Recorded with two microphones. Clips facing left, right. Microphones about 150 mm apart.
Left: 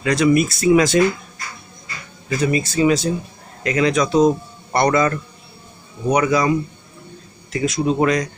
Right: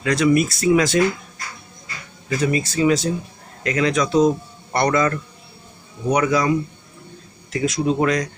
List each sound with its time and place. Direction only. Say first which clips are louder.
0.0 s speech: left 1 dB; 15° left (ahead or behind)
2.2 s speech: left 1 dB; 15° left (ahead or behind)
7.5 s speech: left 1 dB; 5° left (ahead or behind)